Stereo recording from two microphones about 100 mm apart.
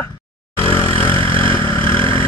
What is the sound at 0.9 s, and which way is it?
Vehicle, 65° right (ahead or behind).